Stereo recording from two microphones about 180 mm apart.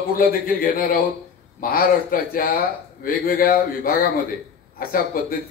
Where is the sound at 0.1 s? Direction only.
55° left (ahead or behind).